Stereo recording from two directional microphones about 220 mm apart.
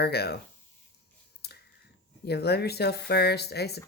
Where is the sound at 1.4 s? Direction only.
45° left (ahead or behind).